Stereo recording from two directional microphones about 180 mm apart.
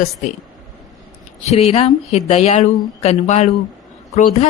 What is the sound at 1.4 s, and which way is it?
Speech, 35° left (ahead or behind).